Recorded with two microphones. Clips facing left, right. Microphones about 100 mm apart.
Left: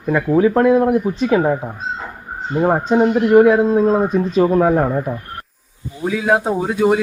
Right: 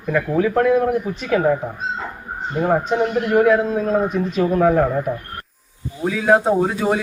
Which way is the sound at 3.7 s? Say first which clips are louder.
Left 4 dB; 30° left (ahead or behind).